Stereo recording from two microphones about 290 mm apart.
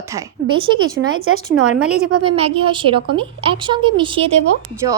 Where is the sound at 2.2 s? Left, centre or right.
Centre.